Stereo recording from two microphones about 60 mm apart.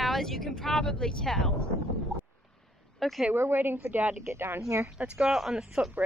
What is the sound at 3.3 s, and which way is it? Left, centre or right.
A woman's voice, right.